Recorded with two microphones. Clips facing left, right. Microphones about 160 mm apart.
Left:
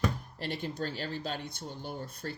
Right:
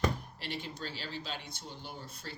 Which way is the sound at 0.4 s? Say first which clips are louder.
Left 6 dB; 50° left (ahead or behind).